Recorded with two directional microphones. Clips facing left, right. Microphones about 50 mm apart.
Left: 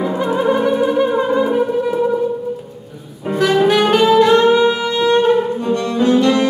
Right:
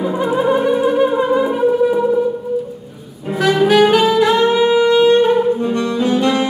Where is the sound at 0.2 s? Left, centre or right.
Centre.